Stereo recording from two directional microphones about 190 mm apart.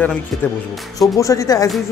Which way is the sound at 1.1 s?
15° left (ahead or behind).